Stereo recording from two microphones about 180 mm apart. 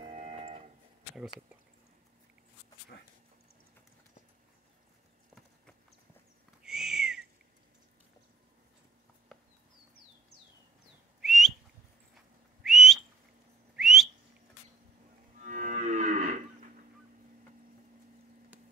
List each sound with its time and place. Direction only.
0.2 s music: 40° right (ahead or behind)
6.6 s owl: 5° right (ahead or behind)
11.1 s whistling: centre (ahead or behind)
12.6 s whistling: centre (ahead or behind)
15.3 s livestock: 45° right (ahead or behind)